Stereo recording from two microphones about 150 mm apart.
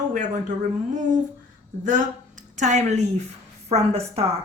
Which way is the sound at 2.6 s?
50° right (ahead or behind).